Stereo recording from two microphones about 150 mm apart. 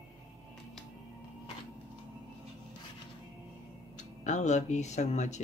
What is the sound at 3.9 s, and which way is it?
Speech, 55° left (ahead or behind).